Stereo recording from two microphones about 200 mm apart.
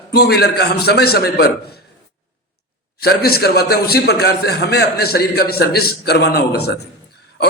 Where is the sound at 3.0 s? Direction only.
50° left (ahead or behind).